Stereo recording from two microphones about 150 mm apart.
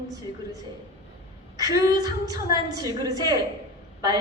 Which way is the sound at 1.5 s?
25° right (ahead or behind).